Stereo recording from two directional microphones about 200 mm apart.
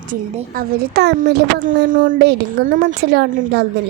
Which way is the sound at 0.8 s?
55° right (ahead or behind).